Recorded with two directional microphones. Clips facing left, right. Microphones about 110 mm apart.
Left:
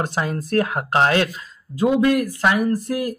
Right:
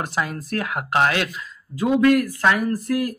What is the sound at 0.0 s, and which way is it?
Speech, 30° left (ahead or behind).